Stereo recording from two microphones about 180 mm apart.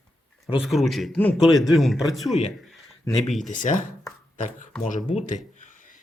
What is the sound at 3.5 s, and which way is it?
Speech, 45° left (ahead or behind).